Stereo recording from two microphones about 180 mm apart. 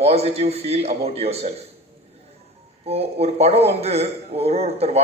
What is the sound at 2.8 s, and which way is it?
A man's voice, 35° right (ahead or behind).